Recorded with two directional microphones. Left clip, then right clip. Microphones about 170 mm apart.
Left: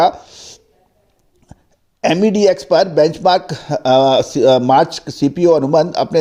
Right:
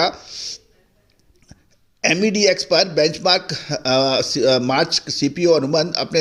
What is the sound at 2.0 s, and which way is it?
A man's voice, 40° left (ahead or behind).